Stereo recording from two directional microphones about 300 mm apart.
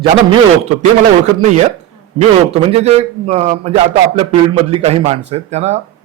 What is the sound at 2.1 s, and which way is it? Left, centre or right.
Speech, right.